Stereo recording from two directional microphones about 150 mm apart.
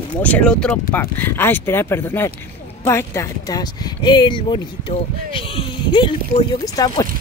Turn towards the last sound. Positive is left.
turn(degrees=25)  # may be behind; listen again after turning